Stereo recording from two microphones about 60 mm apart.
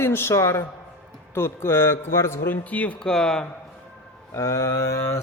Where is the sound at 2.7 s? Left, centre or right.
Left.